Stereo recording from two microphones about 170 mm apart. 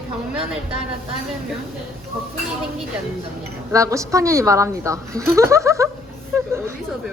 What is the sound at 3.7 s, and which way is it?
A woman's voice, 20° right (ahead or behind).